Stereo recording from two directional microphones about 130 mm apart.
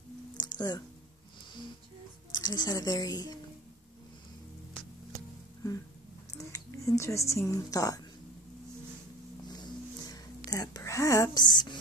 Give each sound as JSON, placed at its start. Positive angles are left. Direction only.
{"t": 0.4, "sound": "a sound", "side_deg": 35}
{"t": 2.3, "sound": "speech", "side_deg": 30}
{"t": 5.1, "sound": "music", "side_deg": 25}
{"t": 6.5, "sound": "speech", "side_deg": 25}
{"t": 9.5, "sound": "music", "side_deg": 30}